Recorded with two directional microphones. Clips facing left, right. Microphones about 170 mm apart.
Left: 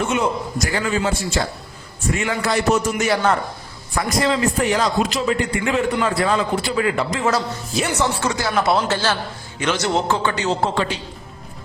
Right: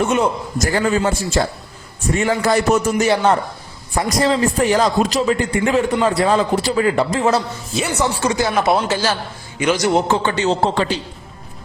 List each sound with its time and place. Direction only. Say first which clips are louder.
0.6 s a man's voice: right 5 dB; 45° right (ahead or behind)
7.7 s a man's voice: right 1 dB; centre (ahead or behind)
7.9 s a man's voice: right 6 dB; 15° right (ahead or behind); by 11.0 s 35° right (ahead or behind)